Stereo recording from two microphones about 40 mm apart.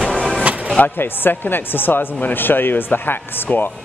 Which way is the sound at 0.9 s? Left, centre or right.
Left.